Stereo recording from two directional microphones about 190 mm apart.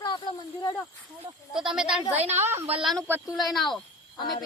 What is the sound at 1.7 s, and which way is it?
Speech, 5° right (ahead or behind).